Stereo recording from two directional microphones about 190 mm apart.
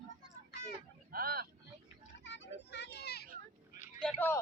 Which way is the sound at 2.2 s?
70° left (ahead or behind).